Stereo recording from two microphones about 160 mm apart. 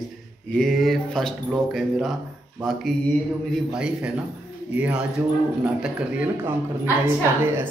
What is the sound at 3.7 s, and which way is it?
A man's voice, 5° right (ahead or behind).